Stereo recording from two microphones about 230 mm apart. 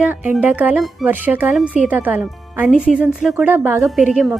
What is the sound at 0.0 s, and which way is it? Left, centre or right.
Speech, centre.